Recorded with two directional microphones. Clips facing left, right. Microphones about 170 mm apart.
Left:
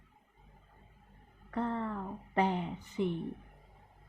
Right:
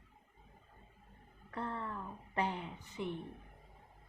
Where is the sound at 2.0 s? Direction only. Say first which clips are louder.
Left 6 dB; 25° left (ahead or behind).